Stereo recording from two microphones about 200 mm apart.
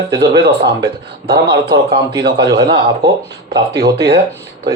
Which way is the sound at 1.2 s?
50° right (ahead or behind).